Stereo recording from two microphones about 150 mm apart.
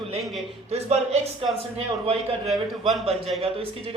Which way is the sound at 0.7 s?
45° right (ahead or behind).